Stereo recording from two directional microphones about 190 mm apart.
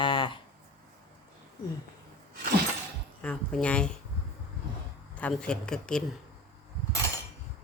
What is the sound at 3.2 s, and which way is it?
Speech, 5° left (ahead or behind).